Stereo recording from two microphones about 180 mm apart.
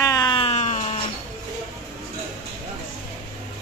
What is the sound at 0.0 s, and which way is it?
Wail, 20° left (ahead or behind).